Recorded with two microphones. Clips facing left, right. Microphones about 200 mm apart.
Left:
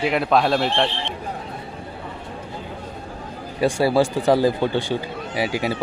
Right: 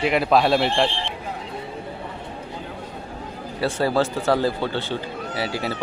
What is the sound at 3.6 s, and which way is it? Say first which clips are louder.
Speech: left 3 dB; 10° left (ahead or behind).